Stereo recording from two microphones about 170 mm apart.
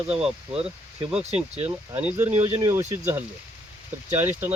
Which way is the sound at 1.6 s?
10° right (ahead or behind).